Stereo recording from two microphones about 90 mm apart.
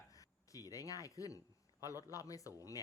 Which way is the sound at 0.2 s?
40° left (ahead or behind).